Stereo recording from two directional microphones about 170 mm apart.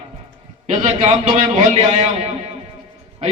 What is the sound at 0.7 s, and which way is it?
Speech, 35° right (ahead or behind).